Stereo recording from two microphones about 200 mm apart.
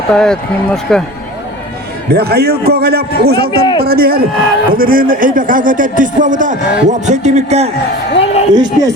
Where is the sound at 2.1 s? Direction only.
50° right (ahead or behind); by 7.6 s 35° right (ahead or behind).